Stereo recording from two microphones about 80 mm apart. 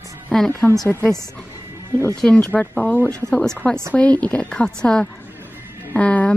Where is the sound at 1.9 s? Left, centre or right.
Left.